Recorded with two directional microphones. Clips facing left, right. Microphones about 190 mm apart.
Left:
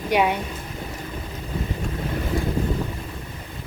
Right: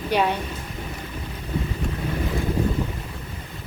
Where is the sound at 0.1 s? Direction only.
10° left (ahead or behind).